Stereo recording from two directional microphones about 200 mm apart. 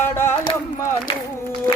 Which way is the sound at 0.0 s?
10° left (ahead or behind).